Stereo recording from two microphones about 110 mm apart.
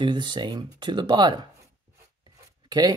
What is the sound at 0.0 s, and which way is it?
Speech, 45° right (ahead or behind).